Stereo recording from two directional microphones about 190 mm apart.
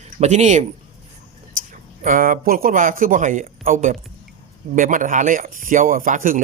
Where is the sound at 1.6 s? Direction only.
45° right (ahead or behind).